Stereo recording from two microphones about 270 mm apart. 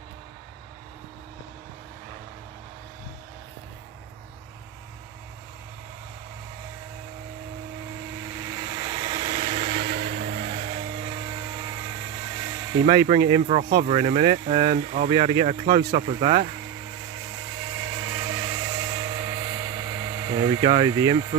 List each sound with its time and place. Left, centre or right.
8.5 s vehicle: centre
13.3 s speech: right
17.7 s dental drill: centre